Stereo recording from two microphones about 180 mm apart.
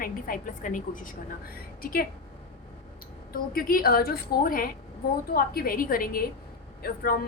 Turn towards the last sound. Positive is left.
turn(degrees=55)  # may be behind; listen again after turning